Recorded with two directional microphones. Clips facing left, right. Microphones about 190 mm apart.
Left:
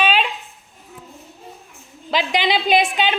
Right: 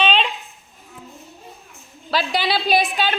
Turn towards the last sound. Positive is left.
turn(degrees=20)  # may be behind; listen again after turning